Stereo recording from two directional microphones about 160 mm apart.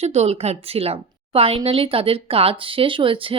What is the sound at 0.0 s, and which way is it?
A woman's voice, 40° right (ahead or behind).